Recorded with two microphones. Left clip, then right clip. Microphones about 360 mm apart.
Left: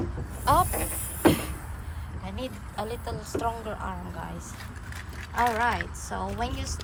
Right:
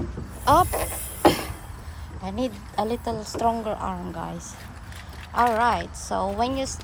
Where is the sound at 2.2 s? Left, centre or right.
Right.